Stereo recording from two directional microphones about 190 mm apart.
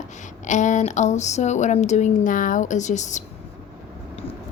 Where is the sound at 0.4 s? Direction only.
40° left (ahead or behind).